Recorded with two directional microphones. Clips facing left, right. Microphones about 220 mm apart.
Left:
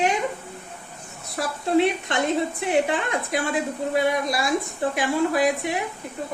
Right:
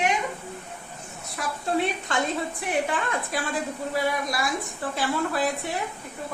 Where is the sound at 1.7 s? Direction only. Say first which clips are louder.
Left 6 dB; 20° left (ahead or behind).